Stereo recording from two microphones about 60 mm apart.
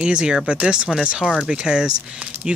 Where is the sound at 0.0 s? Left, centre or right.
Centre.